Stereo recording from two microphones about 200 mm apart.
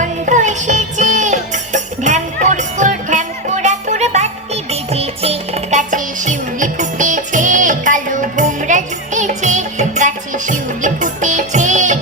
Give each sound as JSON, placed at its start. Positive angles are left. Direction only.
{"t": 0.0, "sound": "music", "side_deg": -40}